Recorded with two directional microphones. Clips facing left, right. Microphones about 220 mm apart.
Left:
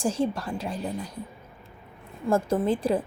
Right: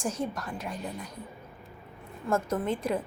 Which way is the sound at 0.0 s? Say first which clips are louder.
Left 6 dB; 30° left (ahead or behind).